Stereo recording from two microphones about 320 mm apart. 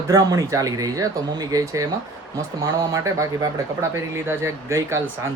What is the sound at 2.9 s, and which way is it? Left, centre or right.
Speech, centre.